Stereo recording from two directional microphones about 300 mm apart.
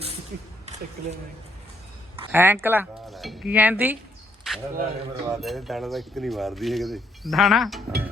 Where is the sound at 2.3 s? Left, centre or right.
Centre.